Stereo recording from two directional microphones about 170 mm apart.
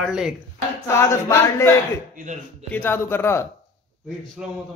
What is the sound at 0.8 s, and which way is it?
Speech, 15° left (ahead or behind).